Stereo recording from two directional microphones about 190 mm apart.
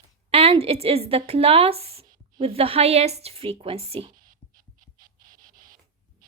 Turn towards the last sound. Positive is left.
turn(degrees=-45)  # may be behind; listen again after turning